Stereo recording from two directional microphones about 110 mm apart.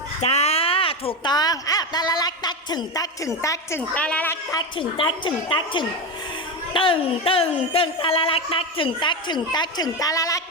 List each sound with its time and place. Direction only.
0.2 s a sound: 75° left (ahead or behind); by 1.3 s 55° left (ahead or behind)
1.3 s a woman's voice: 35° left (ahead or behind)
3.9 s a woman's voice: 10° left (ahead or behind)
4.8 s speech: 50° left (ahead or behind); by 10.4 s 30° left (ahead or behind)